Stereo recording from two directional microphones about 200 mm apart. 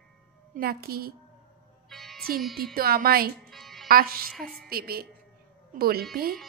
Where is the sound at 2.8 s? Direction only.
50° right (ahead or behind).